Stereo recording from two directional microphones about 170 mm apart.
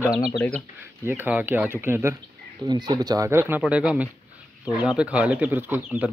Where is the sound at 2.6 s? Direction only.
25° right (ahead or behind).